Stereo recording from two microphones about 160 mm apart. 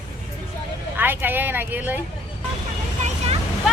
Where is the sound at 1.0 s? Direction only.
10° right (ahead or behind).